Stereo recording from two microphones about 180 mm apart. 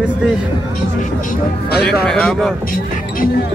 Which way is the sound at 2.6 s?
50° left (ahead or behind).